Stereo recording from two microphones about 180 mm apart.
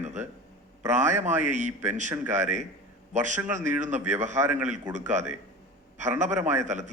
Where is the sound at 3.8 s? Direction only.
40° right (ahead or behind).